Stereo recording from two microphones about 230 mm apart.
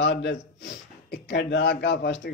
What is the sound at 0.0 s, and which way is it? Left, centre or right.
A man's voice, left.